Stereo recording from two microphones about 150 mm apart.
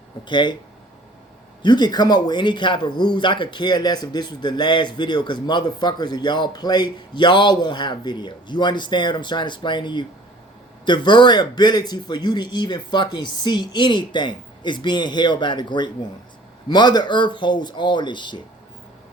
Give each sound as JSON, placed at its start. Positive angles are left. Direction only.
{"t": 0.3, "sound": "speech", "side_deg": 30}
{"t": 1.6, "sound": "speech", "side_deg": 30}